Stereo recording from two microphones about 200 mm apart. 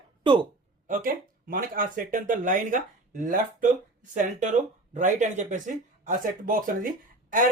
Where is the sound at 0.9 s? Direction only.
45° right (ahead or behind).